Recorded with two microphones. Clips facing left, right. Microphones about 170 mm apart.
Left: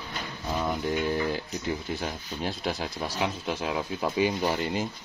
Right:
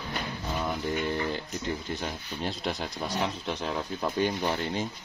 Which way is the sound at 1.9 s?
Centre (ahead or behind).